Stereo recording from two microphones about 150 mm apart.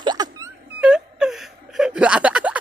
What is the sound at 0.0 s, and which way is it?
Music, 25° right (ahead or behind).